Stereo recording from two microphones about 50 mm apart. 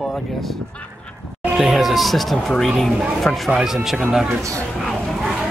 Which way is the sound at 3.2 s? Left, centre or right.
Centre.